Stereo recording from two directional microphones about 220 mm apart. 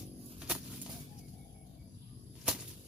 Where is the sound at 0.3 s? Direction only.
5° right (ahead or behind).